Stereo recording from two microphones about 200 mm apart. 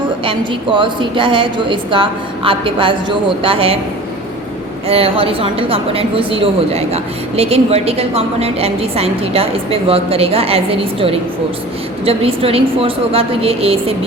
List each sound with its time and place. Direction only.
0.3 s a woman's voice: 25° right (ahead or behind)
4.9 s a woman's voice: 30° right (ahead or behind)